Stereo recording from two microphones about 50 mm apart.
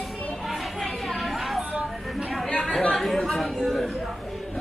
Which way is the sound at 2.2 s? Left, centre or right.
Centre.